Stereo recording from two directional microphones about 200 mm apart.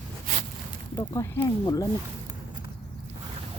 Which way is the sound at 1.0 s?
15° left (ahead or behind).